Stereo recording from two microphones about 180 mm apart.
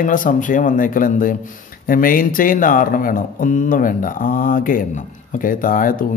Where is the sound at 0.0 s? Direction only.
45° left (ahead or behind).